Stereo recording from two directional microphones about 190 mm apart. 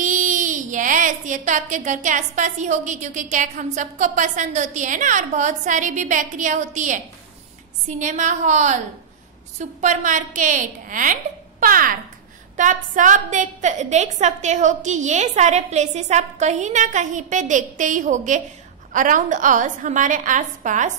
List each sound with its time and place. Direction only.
0.0 s a woman's voice: 40° right (ahead or behind)